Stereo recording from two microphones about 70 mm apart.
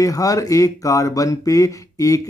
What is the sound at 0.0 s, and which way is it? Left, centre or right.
Speech, left.